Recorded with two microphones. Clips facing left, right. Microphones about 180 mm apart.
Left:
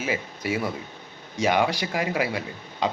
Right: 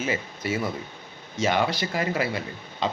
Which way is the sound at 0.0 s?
10° left (ahead or behind).